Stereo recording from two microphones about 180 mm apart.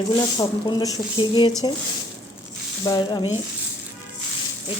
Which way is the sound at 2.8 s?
20° left (ahead or behind).